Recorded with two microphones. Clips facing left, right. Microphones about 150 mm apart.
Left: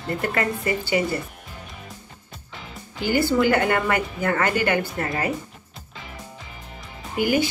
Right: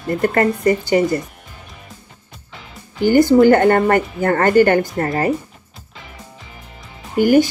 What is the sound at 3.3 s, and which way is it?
Speech, 45° right (ahead or behind).